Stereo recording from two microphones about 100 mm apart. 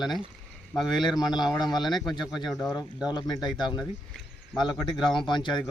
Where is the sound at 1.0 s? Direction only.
45° left (ahead or behind).